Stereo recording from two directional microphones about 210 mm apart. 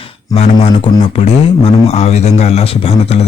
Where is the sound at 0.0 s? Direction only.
30° left (ahead or behind).